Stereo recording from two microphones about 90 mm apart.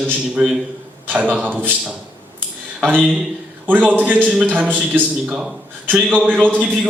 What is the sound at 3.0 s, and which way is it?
Speech, centre (ahead or behind).